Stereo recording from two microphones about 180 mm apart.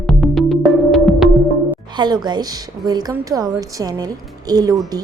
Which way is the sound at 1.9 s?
25° right (ahead or behind).